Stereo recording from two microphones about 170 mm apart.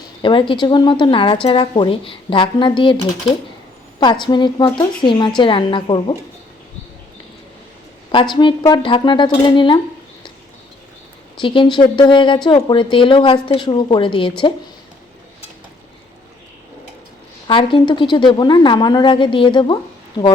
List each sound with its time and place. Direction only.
0.2 s speech: 30° left (ahead or behind)
8.1 s speech: 25° left (ahead or behind)
11.3 s speech: 30° left (ahead or behind)
17.5 s speech: 30° left (ahead or behind)